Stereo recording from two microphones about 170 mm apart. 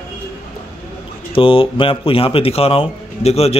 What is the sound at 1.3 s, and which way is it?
Speech, 30° left (ahead or behind).